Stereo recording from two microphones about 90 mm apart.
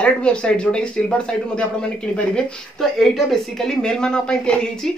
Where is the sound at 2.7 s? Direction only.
5° left (ahead or behind).